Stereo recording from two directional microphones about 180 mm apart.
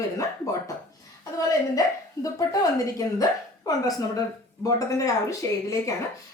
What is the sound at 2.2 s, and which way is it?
A woman's voice, 20° left (ahead or behind).